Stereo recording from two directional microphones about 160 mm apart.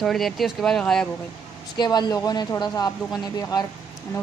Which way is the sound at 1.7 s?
25° left (ahead or behind).